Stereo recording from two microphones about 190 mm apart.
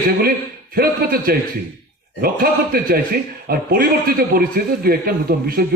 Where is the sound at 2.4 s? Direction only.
50° right (ahead or behind).